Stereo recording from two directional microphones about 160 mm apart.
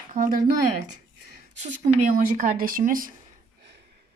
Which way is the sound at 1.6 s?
45° right (ahead or behind).